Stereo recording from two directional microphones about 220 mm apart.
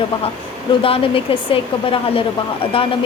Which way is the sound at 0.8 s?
25° left (ahead or behind).